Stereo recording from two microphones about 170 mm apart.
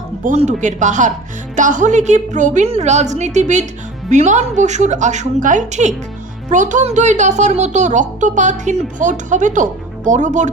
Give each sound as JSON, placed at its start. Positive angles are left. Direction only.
{"t": 0.3, "sound": "speech", "side_deg": -45}